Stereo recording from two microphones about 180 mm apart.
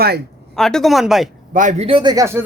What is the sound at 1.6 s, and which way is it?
Speech, 40° right (ahead or behind).